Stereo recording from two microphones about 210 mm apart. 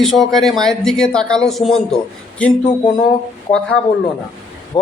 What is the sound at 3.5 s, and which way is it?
Speech, 25° left (ahead or behind).